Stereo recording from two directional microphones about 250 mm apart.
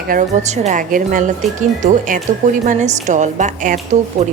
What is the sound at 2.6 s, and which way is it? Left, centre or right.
A woman's voice, right.